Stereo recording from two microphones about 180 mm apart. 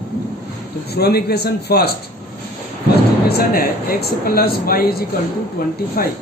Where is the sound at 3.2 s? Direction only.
55° left (ahead or behind).